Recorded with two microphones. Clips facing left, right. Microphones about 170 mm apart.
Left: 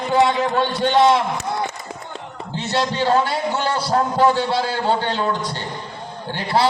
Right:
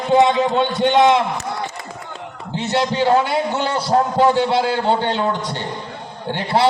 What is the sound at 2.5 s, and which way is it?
A man's voice, 20° right (ahead or behind).